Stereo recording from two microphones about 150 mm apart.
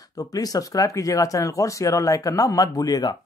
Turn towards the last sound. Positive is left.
turn(degrees=25)  # may be behind; listen again after turning